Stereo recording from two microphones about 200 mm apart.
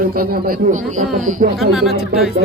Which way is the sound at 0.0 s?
45° right (ahead or behind).